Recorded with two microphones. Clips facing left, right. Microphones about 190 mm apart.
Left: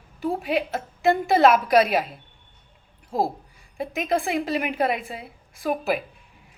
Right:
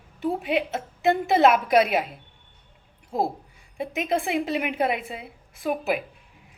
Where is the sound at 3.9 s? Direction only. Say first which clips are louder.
Left 1 dB; 25° right (ahead or behind).